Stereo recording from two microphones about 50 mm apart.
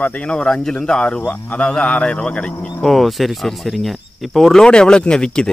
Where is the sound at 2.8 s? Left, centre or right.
Centre.